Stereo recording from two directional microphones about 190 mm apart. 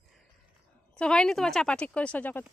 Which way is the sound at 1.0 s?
5° left (ahead or behind).